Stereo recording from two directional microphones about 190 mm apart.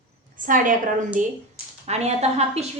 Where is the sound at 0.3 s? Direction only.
45° right (ahead or behind).